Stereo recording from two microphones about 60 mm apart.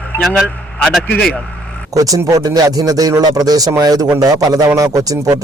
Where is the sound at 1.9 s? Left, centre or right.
Right.